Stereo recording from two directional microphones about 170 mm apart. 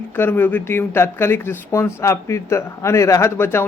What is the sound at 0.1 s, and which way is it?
A man's voice, 10° left (ahead or behind).